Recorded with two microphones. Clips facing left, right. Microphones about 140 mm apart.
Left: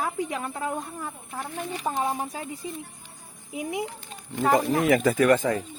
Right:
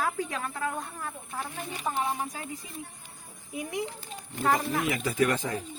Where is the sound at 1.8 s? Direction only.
30° left (ahead or behind).